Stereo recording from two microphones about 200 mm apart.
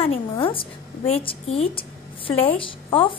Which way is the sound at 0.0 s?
25° left (ahead or behind).